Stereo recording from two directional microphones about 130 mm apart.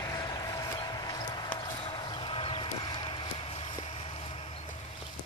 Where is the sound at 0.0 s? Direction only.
30° left (ahead or behind); by 4.6 s 50° left (ahead or behind).